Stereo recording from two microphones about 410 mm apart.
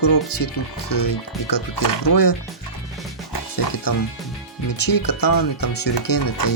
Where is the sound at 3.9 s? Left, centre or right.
Left.